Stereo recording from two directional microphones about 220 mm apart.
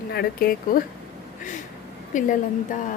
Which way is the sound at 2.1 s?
35° left (ahead or behind).